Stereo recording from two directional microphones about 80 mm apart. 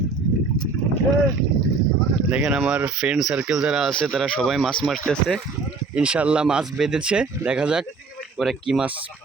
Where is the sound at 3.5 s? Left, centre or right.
Centre.